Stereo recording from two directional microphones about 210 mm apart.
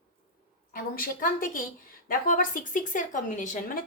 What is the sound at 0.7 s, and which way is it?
Speech, 40° left (ahead or behind).